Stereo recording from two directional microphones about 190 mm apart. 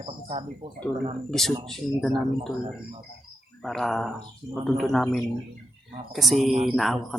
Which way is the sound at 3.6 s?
Centre (ahead or behind).